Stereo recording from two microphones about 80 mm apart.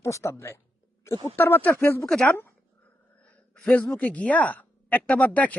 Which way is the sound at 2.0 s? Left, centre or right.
Centre.